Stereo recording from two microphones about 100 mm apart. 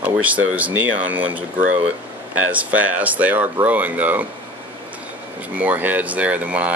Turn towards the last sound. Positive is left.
turn(degrees=-15)  # may be behind; listen again after turning